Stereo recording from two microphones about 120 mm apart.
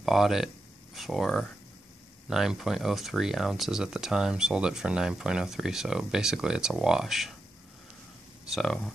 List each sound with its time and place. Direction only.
0.0 s speech: centre (ahead or behind)
8.5 s speech: centre (ahead or behind)